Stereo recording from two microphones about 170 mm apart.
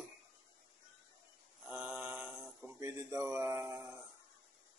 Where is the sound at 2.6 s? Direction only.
15° right (ahead or behind).